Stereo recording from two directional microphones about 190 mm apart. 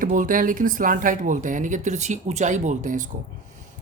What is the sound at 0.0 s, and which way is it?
A man's voice, 45° right (ahead or behind).